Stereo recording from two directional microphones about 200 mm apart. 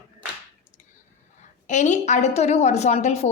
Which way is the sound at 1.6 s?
35° left (ahead or behind).